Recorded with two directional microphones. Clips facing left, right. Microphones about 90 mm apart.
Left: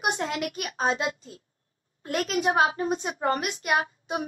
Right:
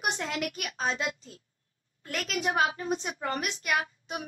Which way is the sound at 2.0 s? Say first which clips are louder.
Left 6 dB; 35° left (ahead or behind).